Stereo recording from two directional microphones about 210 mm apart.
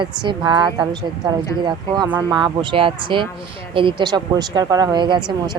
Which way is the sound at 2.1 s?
20° right (ahead or behind).